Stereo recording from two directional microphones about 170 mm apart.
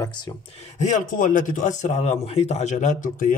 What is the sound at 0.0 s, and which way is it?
Speech, 25° left (ahead or behind).